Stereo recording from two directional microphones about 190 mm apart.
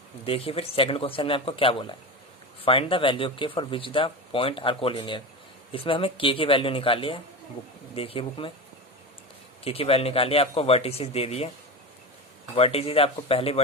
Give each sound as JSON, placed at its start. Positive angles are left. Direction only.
{"t": 0.3, "sound": "speech", "side_deg": 30}
{"t": 9.6, "sound": "speech", "side_deg": 30}
{"t": 12.5, "sound": "speech", "side_deg": 30}